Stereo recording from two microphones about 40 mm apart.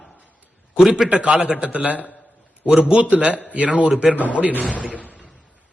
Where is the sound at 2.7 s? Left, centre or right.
Right.